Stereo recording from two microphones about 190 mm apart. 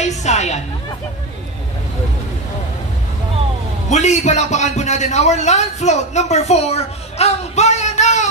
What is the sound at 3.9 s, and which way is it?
A man's voice, 35° left (ahead or behind).